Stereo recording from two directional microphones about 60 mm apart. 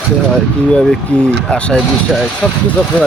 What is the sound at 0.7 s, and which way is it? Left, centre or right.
Speech, centre.